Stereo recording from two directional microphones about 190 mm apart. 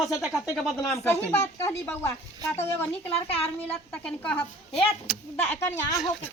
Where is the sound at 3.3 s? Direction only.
30° left (ahead or behind).